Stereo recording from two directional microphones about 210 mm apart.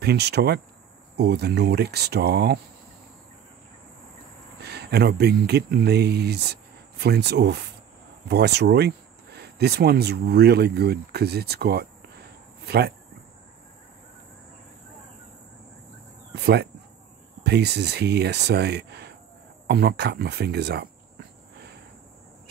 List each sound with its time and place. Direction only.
0.0 s speech: 50° right (ahead or behind)
4.6 s speech: 50° right (ahead or behind)
16.3 s speech: 50° right (ahead or behind)
19.7 s cricket: 50° right (ahead or behind)